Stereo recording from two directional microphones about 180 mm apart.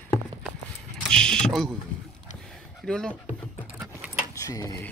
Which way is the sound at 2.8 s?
5° left (ahead or behind).